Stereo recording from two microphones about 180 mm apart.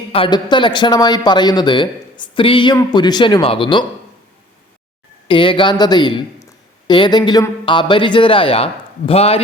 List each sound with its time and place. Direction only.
0.1 s speech: 25° left (ahead or behind)
5.3 s a man's voice: 30° left (ahead or behind)